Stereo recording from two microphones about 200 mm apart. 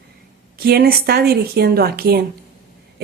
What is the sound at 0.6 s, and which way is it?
A woman's voice, 50° right (ahead or behind).